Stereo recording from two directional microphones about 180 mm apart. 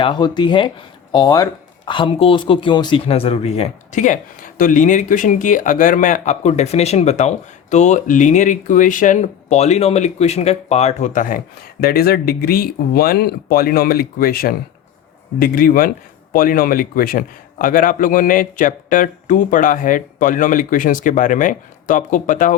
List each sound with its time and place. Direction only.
0.0 s speech: 25° left (ahead or behind); by 22.5 s 45° left (ahead or behind)